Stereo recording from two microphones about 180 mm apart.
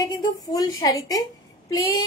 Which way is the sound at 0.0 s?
20° left (ahead or behind).